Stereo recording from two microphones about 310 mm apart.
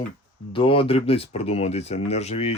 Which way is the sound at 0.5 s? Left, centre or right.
Centre.